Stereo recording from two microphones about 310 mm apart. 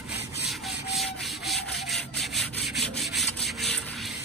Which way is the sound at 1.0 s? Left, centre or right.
Centre.